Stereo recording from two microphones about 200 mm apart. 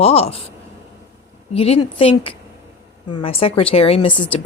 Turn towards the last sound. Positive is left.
turn(degrees=25)  # may be behind; listen again after turning